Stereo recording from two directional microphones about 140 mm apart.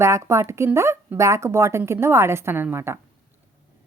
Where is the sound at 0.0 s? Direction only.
20° right (ahead or behind).